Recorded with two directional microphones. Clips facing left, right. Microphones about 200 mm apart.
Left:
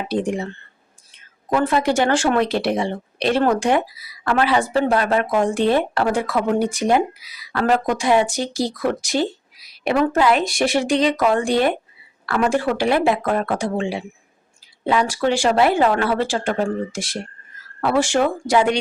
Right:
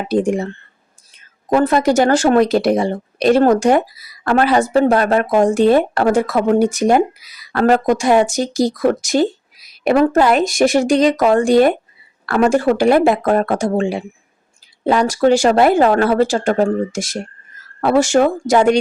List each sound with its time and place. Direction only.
0.1 s speech: 45° right (ahead or behind)